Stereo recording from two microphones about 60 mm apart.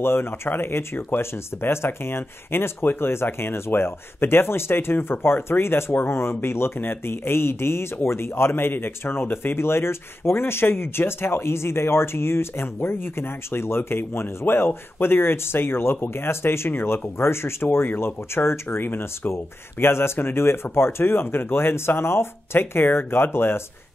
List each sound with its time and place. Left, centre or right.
0.0 s speech: left